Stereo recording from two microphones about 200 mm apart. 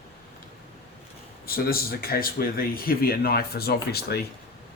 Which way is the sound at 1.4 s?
45° left (ahead or behind).